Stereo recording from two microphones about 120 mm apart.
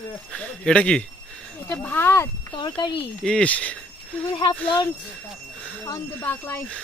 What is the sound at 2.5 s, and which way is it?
Speech, 40° left (ahead or behind).